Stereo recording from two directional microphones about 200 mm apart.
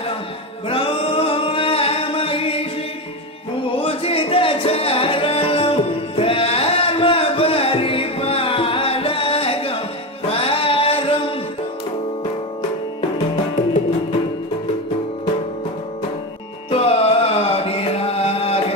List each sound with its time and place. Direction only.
0.7 s singing: 25° left (ahead or behind)
3.8 s music: 30° left (ahead or behind)
16.7 s mantra: 30° left (ahead or behind)